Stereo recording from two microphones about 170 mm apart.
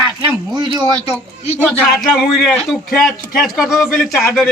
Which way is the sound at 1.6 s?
Centre (ahead or behind).